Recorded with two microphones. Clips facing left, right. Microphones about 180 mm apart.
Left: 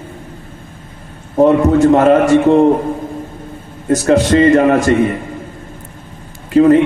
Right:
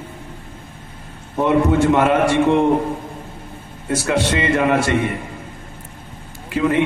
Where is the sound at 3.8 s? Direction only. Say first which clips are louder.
Left 8 dB; 40° left (ahead or behind).